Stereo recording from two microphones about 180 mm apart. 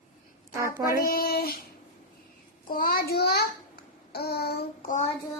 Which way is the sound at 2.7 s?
55° left (ahead or behind).